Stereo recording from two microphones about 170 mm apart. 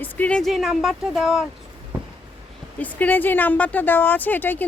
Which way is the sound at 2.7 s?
10° left (ahead or behind).